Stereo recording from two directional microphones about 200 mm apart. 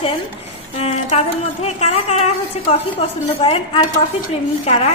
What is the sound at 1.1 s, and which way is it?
A woman's voice, 30° left (ahead or behind).